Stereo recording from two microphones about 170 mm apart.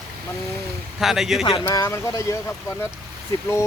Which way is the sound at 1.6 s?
20° left (ahead or behind).